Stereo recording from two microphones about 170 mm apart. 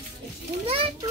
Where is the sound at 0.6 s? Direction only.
35° right (ahead or behind).